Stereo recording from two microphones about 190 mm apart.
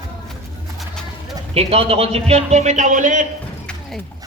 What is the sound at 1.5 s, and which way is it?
Speech, 30° right (ahead or behind).